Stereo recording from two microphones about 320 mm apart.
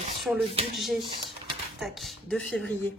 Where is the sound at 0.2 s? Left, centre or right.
Centre.